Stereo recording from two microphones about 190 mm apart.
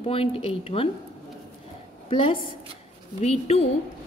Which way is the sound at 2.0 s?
30° left (ahead or behind).